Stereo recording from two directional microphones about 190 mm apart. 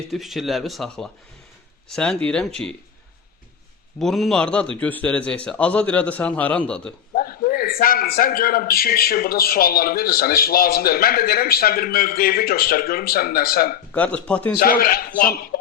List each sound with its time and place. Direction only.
0.1 s speech: centre (ahead or behind)
4.0 s a man's voice: centre (ahead or behind)
7.2 s a man's voice: 50° left (ahead or behind)
13.9 s a man's voice: 5° left (ahead or behind)
14.6 s a man's voice: 50° left (ahead or behind)